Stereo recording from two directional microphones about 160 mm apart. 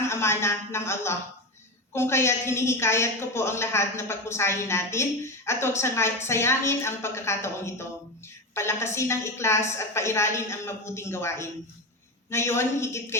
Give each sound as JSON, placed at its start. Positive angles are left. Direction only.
{"t": 0.1, "sound": "a woman's voice", "side_deg": 15}